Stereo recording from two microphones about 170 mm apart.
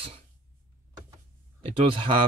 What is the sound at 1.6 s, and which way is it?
Speech, 30° right (ahead or behind).